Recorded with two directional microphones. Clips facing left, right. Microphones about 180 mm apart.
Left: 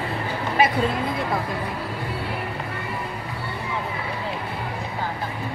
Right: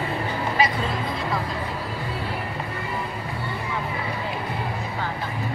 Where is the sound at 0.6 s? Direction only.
55° left (ahead or behind).